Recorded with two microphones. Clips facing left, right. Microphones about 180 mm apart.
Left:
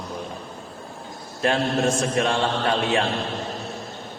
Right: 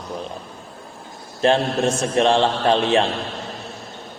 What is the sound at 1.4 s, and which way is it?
A man's voice, 30° right (ahead or behind).